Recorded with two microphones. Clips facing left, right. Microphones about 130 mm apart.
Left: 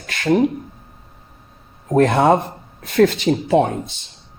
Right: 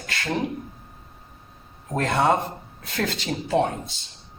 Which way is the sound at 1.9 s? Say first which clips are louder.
Left 7 dB; 55° left (ahead or behind).